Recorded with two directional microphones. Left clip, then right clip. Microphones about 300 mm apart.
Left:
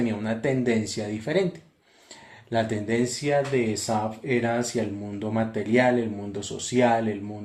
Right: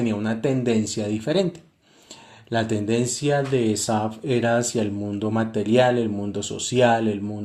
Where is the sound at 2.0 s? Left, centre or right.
Right.